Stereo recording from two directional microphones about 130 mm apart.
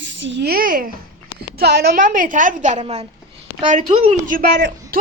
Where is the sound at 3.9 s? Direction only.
45° right (ahead or behind).